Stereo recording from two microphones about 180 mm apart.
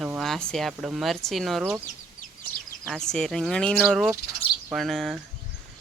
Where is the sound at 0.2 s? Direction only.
Centre (ahead or behind).